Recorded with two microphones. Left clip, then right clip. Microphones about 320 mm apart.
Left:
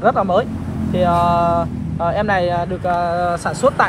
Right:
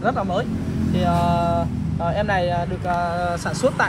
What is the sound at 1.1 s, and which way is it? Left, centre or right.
Speech, left.